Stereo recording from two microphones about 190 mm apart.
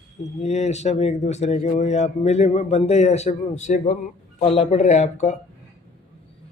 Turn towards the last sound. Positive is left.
turn(degrees=35)  # may be behind; listen again after turning